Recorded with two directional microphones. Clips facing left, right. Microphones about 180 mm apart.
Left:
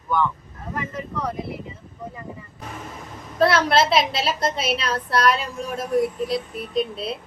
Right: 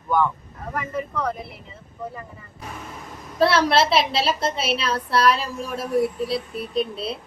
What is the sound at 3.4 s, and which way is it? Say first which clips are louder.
Speech: even; 30° right (ahead or behind).